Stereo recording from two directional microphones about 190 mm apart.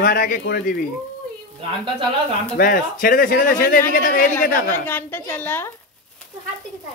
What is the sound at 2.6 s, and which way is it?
Speech, 50° left (ahead or behind).